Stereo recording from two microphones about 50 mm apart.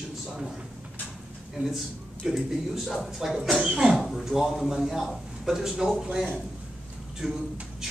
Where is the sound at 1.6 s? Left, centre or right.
Right.